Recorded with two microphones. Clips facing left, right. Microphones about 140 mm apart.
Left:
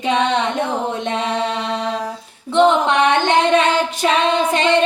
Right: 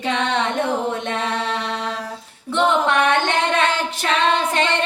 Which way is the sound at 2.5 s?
20° left (ahead or behind).